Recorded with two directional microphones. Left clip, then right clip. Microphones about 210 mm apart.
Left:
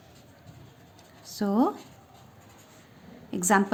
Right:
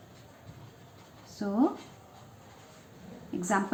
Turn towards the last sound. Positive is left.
turn(degrees=60)  # may be behind; listen again after turning